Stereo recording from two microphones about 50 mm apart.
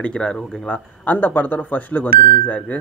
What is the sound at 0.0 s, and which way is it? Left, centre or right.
Speech, left.